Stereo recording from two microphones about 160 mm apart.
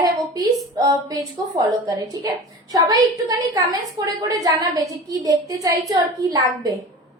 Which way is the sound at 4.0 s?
25° right (ahead or behind).